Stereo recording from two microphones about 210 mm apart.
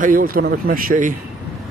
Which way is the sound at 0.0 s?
40° right (ahead or behind).